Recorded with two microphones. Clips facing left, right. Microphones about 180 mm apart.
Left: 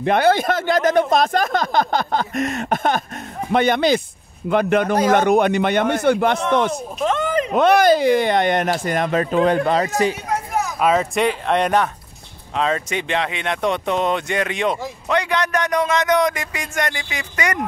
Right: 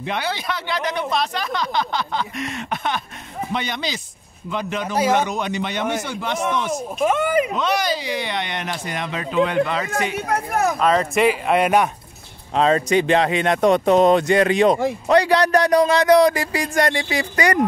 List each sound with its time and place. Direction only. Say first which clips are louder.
0.0 s speech: left 10 dB; 50° left (ahead or behind)
7.0 s speech: right 2 dB; 10° right (ahead or behind)
7.5 s speech: left 8 dB; 55° left (ahead or behind)
10.1 s speech: right 1 dB; 60° right (ahead or behind)
10.8 s speech: left 2 dB; 5° left (ahead or behind)
12.5 s speech: right 5 dB; 35° right (ahead or behind)